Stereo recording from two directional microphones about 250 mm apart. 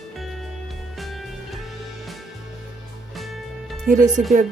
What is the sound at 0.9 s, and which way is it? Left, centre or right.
Music, centre.